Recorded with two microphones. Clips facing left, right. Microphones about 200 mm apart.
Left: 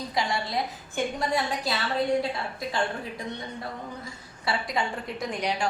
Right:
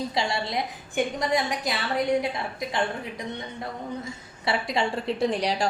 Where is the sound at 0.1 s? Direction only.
25° right (ahead or behind).